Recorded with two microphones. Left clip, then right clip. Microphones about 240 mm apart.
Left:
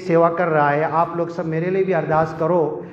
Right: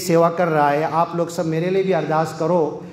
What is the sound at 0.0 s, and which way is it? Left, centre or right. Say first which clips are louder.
A man's voice: even; right.